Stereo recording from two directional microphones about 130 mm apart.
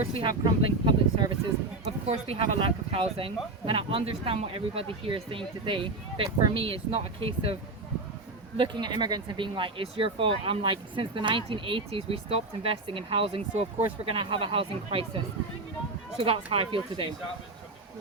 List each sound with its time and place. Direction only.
0.0 s speech: 40° right (ahead or behind)
1.8 s speech: 50° right (ahead or behind)
8.5 s speech: 40° right (ahead or behind)